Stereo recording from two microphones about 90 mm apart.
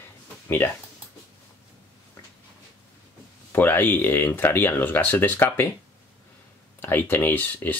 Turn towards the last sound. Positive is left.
turn(degrees=20)  # may be behind; listen again after turning